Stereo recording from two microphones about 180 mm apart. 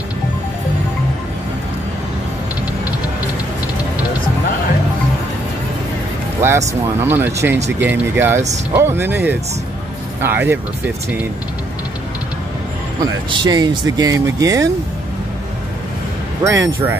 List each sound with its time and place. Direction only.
7.0 s speech: 10° right (ahead or behind)
13.0 s speech: 25° right (ahead or behind)
16.4 s speech: 10° right (ahead or behind)